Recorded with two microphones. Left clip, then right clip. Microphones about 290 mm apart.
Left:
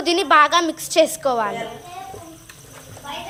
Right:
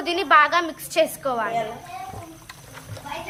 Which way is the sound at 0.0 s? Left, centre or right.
Left.